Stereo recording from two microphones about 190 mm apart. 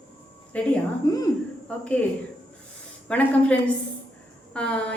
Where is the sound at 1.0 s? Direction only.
20° left (ahead or behind).